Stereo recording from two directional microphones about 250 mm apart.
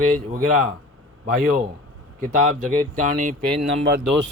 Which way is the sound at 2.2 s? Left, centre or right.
Right.